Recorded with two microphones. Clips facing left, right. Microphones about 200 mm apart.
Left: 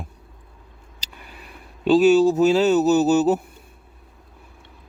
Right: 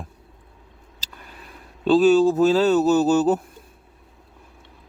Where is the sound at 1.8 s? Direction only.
10° left (ahead or behind).